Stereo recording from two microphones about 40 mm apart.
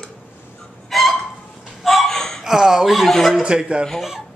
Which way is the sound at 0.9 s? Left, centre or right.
Centre.